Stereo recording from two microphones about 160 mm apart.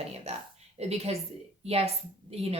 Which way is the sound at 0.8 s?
40° right (ahead or behind).